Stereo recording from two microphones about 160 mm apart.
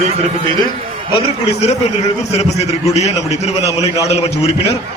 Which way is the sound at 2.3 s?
40° left (ahead or behind).